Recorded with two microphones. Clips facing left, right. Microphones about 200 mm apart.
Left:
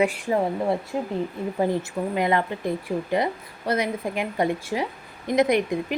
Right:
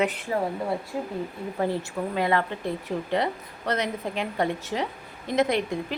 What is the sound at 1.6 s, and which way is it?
Speech, 15° left (ahead or behind).